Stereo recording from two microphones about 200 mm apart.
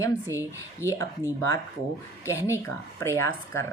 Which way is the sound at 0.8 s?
15° left (ahead or behind).